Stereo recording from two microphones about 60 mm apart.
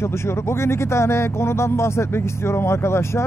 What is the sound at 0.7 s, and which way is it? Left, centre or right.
Speech, left.